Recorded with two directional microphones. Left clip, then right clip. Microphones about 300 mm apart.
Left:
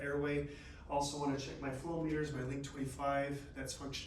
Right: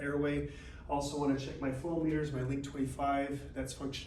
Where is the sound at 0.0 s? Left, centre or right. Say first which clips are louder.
Right 3 dB; centre.